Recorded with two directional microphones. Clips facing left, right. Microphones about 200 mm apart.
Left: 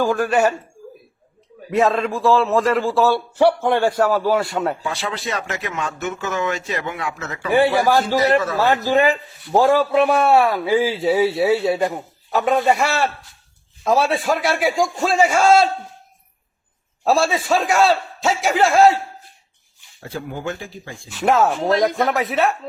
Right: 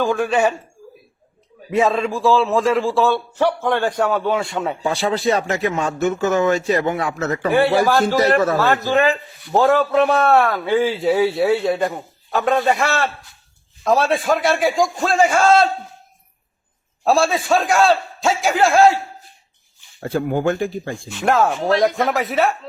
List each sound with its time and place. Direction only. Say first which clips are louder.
0.0 s a man's voice: even; 5° left (ahead or behind)
1.7 s a man's voice: even; centre (ahead or behind)
4.8 s speech: right 6 dB; 30° right (ahead or behind)
7.9 s a man's voice: right 1 dB; 15° left (ahead or behind)
17.0 s a man's voice: right 1 dB; centre (ahead or behind)
20.0 s speech: right 9 dB; 55° right (ahead or behind)
21.1 s a man's voice: left 1 dB; centre (ahead or behind)